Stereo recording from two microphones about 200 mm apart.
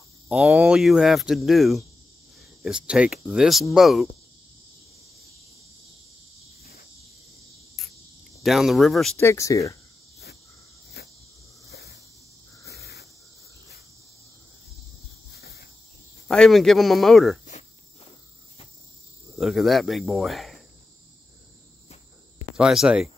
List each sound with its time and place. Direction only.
0.3 s speech: 5° right (ahead or behind)
6.6 s cricket: 50° left (ahead or behind)
8.4 s speech: centre (ahead or behind)
9.2 s speech: 15° left (ahead or behind)
11.7 s snake: 55° left (ahead or behind)
15.3 s a sound: 50° left (ahead or behind)
16.3 s speech: centre (ahead or behind)
19.3 s speech: centre (ahead or behind)
22.6 s speech: 5° right (ahead or behind)